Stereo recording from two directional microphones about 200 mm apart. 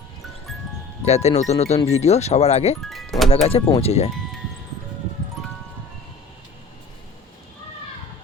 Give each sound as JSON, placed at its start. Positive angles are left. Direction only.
{"t": 1.0, "sound": "speech", "side_deg": 30}
{"t": 2.9, "sound": "music", "side_deg": 0}
{"t": 3.4, "sound": "speech", "side_deg": 30}